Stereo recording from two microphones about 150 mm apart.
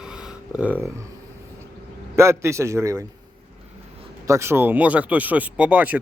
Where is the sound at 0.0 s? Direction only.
5° right (ahead or behind).